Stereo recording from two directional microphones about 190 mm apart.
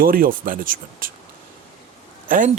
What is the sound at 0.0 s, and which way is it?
Speech, 50° right (ahead or behind).